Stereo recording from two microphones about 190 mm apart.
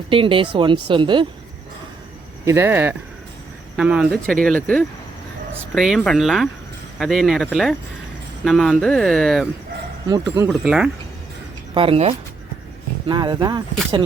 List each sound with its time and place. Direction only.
0.1 s speech: 30° right (ahead or behind)
2.4 s speech: 15° right (ahead or behind); by 9.5 s centre (ahead or behind)
10.1 s speech: 15° right (ahead or behind)
10.5 s speech: 5° right (ahead or behind)
11.7 s speech: 30° right (ahead or behind)